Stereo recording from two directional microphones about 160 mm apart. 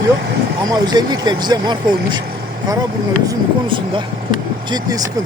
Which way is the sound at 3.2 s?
30° right (ahead or behind).